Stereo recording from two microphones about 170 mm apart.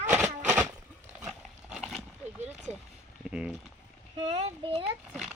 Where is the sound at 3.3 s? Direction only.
5° right (ahead or behind).